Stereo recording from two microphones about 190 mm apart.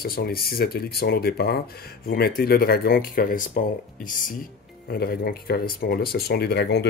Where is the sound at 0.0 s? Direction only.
55° left (ahead or behind).